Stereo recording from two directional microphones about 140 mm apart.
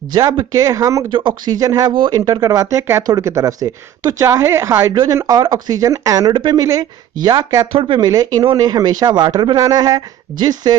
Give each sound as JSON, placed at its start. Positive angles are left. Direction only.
{"t": 0.1, "sound": "speech", "side_deg": -30}